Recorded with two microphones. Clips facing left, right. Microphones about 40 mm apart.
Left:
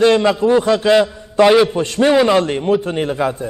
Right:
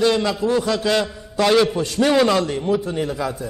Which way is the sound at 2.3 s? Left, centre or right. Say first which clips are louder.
Left 5 dB; left.